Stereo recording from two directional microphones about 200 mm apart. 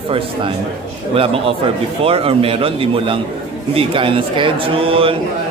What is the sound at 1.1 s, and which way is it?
Speech, 25° right (ahead or behind).